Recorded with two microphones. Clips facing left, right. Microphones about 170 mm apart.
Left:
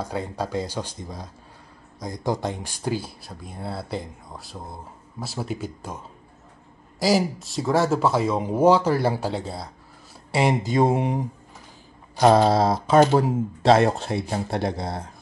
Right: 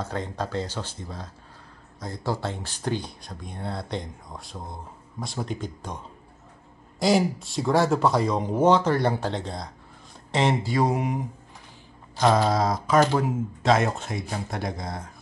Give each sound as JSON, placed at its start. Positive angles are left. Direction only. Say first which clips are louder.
{"t": 0.0, "sound": "speech", "louder": "left 2 dB", "side_deg": 10}
{"t": 10.3, "sound": "mantra", "louder": "left 2 dB", "side_deg": 15}
{"t": 12.2, "sound": "mantra", "louder": "left 4 dB", "side_deg": 30}
{"t": 13.1, "sound": "speech", "louder": "left 4 dB", "side_deg": 35}